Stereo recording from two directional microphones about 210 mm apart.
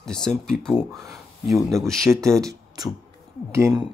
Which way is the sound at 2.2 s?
15° right (ahead or behind).